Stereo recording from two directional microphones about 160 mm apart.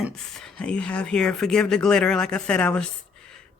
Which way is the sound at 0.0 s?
5° left (ahead or behind).